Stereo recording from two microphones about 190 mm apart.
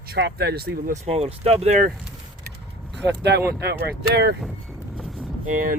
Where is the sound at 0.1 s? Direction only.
60° right (ahead or behind).